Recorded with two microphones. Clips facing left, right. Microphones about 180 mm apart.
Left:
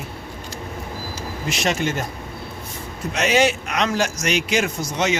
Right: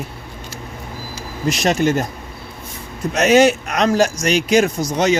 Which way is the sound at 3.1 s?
40° right (ahead or behind).